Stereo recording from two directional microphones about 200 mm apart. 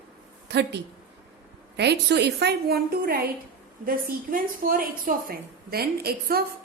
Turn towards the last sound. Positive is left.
turn(degrees=-50)  # may be behind; listen again after turning